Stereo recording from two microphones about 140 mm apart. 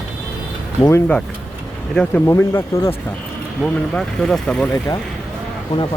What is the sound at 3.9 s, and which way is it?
Speech, 5° left (ahead or behind).